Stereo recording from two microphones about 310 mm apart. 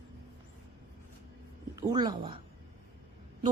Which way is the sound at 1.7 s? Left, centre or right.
Centre.